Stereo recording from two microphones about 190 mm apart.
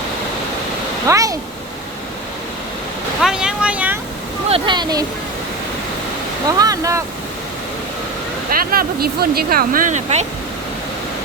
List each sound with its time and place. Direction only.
1.0 s speech: 15° right (ahead or behind)
3.2 s vehicle: 5° right (ahead or behind)
4.4 s a sound: 30° right (ahead or behind)
6.6 s speech: 20° right (ahead or behind)
8.5 s speech: 50° right (ahead or behind)